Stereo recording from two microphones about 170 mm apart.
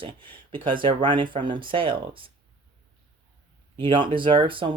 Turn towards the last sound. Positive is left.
turn(degrees=-30)  # may be behind; listen again after turning